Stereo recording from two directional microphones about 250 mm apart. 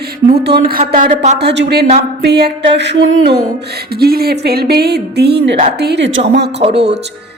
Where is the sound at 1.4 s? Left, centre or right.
Right.